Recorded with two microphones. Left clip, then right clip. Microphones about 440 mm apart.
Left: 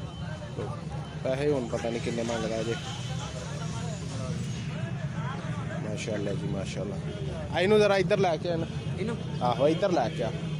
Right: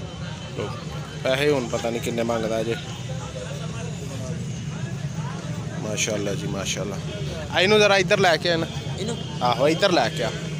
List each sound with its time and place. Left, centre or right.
1.2 s speech: left
5.9 s speech: left
9.0 s a man's voice: left